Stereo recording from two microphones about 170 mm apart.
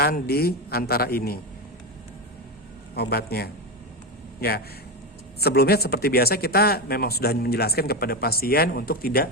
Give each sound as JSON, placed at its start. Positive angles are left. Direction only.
{"t": 0.0, "sound": "speech", "side_deg": 65}
{"t": 2.9, "sound": "a man's voice", "side_deg": 70}